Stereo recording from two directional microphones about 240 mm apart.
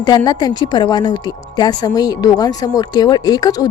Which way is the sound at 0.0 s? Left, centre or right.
Centre.